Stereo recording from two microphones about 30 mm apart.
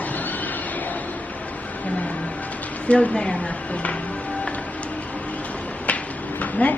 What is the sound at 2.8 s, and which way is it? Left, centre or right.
Speech, left.